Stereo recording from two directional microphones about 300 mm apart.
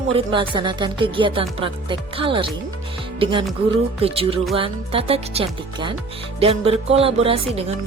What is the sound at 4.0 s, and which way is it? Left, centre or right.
Music, centre.